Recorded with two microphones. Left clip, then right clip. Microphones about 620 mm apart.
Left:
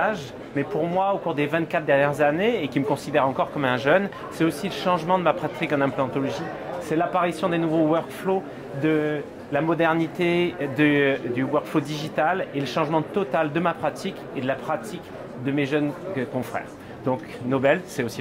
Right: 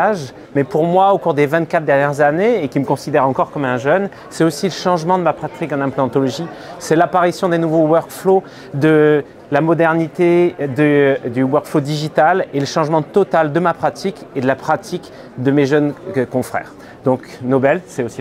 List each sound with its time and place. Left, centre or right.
0.0 s speech: right
4.4 s speech: right
6.9 s speech: right
8.8 s speech: right